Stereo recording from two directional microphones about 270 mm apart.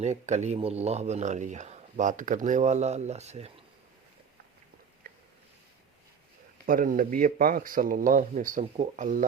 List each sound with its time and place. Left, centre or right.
0.0 s speech: right
5.0 s a sound: right
6.7 s speech: right